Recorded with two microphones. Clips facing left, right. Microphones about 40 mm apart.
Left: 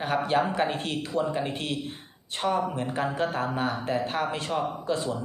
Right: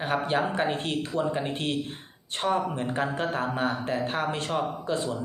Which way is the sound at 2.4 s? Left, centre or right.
Right.